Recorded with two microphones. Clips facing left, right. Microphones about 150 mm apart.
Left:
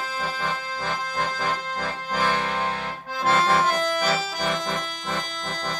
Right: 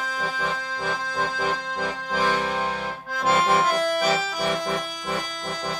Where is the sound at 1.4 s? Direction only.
10° right (ahead or behind).